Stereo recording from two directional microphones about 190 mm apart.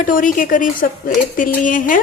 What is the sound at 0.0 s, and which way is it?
A woman's voice, 45° left (ahead or behind).